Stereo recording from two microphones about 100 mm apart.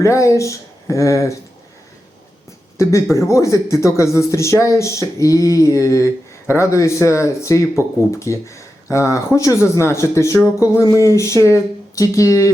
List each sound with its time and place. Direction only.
0.0 s speech: 30° left (ahead or behind)
2.7 s speech: 30° left (ahead or behind)